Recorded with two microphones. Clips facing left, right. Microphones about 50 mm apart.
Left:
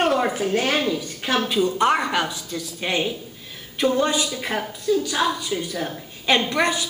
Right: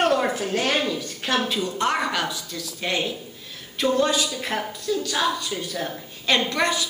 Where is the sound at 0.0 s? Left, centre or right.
Centre.